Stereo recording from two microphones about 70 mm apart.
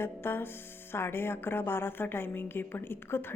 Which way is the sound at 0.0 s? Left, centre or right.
Left.